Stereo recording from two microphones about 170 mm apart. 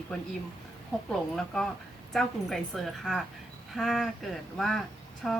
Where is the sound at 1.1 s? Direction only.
5° left (ahead or behind).